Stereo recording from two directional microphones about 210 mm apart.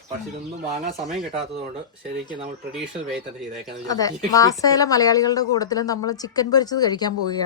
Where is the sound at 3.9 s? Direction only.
15° left (ahead or behind).